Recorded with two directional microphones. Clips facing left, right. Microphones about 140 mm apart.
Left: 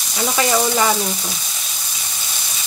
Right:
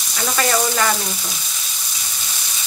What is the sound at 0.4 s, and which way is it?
Speech, 15° left (ahead or behind).